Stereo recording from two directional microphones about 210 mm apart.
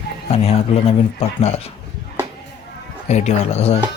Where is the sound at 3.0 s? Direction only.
30° left (ahead or behind).